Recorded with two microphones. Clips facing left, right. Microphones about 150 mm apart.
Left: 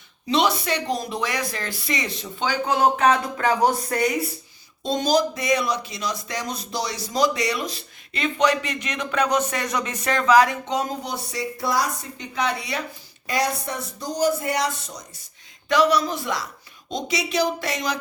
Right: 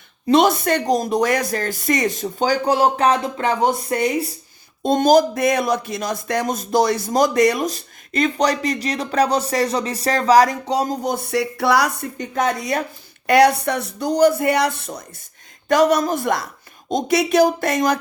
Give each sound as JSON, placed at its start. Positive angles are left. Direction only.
{"t": 0.3, "sound": "speech", "side_deg": -50}
{"t": 4.8, "sound": "speech", "side_deg": -55}
{"t": 12.1, "sound": "speech", "side_deg": -50}
{"t": 13.2, "sound": "speech", "side_deg": -65}
{"t": 15.7, "sound": "speech", "side_deg": -45}